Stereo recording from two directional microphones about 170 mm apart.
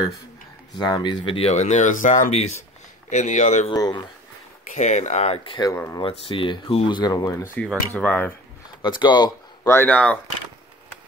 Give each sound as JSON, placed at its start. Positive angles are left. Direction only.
{"t": 0.7, "sound": "speech", "side_deg": 25}
{"t": 3.7, "sound": "speech", "side_deg": 25}
{"t": 4.6, "sound": "speech", "side_deg": 45}
{"t": 5.7, "sound": "speech", "side_deg": 15}
{"t": 6.0, "sound": "speech", "side_deg": 30}
{"t": 7.5, "sound": "speech", "side_deg": 10}
{"t": 8.8, "sound": "speech", "side_deg": 25}